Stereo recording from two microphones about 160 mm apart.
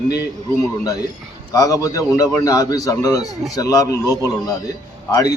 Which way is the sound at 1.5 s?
20° left (ahead or behind).